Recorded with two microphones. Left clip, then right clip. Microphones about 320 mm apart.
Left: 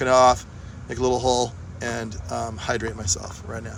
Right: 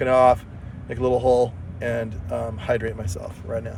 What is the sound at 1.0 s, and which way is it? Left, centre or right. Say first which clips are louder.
Speech: right 3 dB; centre.